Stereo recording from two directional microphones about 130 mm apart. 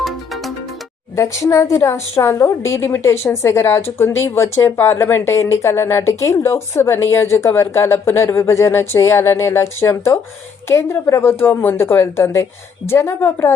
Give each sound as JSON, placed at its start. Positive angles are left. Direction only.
{"t": 1.1, "sound": "a woman's voice", "side_deg": 25}